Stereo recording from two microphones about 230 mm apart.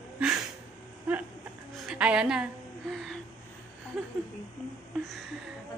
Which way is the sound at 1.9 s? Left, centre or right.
Centre.